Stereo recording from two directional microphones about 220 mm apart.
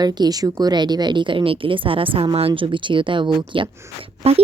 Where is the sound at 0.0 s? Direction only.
20° right (ahead or behind).